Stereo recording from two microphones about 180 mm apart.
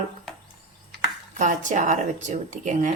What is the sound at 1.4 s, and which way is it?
Speech, 45° right (ahead or behind).